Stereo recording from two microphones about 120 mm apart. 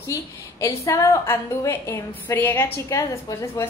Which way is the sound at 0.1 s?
25° left (ahead or behind).